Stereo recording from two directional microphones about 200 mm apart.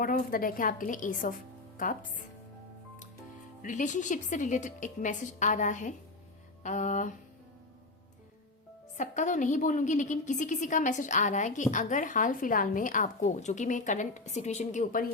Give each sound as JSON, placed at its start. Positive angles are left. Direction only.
{"t": 0.0, "sound": "a woman's voice", "side_deg": 45}
{"t": 3.6, "sound": "a woman's voice", "side_deg": 40}
{"t": 9.0, "sound": "a woman's voice", "side_deg": 40}